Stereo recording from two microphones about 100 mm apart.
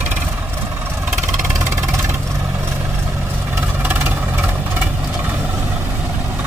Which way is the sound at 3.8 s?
20° right (ahead or behind).